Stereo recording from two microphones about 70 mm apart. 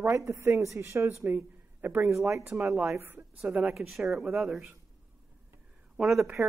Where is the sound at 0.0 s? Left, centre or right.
Right.